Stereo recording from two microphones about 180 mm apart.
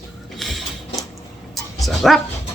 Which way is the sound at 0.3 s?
Centre (ahead or behind).